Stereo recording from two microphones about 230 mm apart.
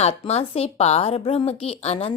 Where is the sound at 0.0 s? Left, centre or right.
Left.